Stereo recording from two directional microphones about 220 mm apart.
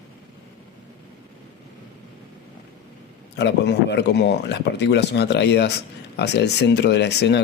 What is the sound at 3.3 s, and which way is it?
Speech, 50° left (ahead or behind).